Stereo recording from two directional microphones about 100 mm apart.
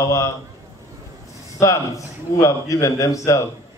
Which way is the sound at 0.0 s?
30° left (ahead or behind).